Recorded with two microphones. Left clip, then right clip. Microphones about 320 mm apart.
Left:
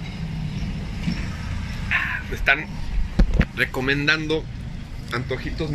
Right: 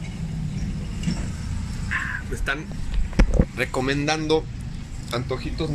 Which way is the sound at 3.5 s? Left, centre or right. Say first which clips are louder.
Left 4 dB; centre.